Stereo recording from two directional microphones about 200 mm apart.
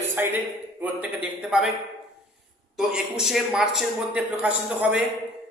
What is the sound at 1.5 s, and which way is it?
Speech, 5° right (ahead or behind).